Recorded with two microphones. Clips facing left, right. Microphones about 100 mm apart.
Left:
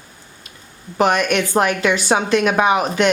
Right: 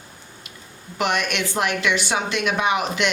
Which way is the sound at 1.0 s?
40° left (ahead or behind).